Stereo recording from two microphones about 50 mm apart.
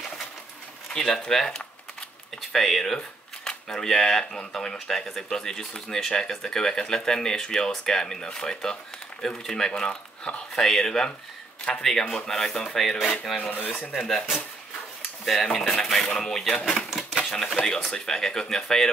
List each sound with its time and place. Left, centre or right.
0.9 s speech: centre
10.5 s speech: centre
13.4 s speech: left
15.2 s speech: centre